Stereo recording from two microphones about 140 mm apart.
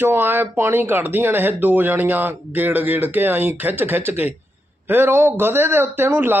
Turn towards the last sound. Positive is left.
turn(degrees=-15)  # may be behind; listen again after turning